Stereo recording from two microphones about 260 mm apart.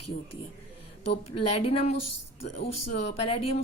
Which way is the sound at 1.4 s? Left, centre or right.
Left.